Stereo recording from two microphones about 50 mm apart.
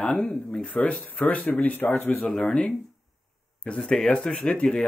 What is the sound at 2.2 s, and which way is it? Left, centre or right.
Speech, centre.